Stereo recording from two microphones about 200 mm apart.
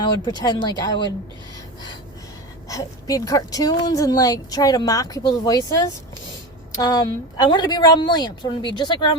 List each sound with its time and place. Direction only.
0.0 s speech: 20° left (ahead or behind)
2.6 s speech: 15° left (ahead or behind)